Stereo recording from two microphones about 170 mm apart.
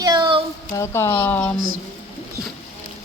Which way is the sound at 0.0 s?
25° right (ahead or behind).